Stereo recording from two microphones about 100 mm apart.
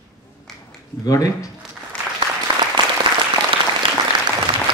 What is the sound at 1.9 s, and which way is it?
Applause, 10° left (ahead or behind).